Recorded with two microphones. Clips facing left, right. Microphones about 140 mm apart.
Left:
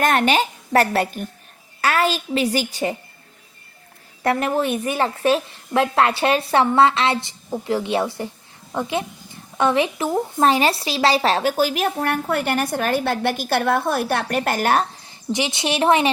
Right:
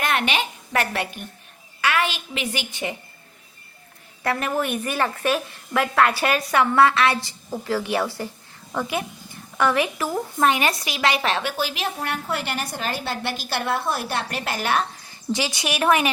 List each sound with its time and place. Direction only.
0.0 s a woman's voice: 45° left (ahead or behind)
4.2 s a woman's voice: 25° left (ahead or behind); by 14.8 s 45° left (ahead or behind)
15.0 s speech: 20° left (ahead or behind)